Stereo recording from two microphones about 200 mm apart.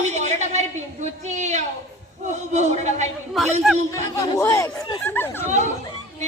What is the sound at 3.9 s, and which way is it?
Speech, 15° left (ahead or behind).